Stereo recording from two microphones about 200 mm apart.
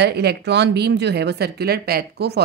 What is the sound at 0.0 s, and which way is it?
A woman's voice, 55° right (ahead or behind).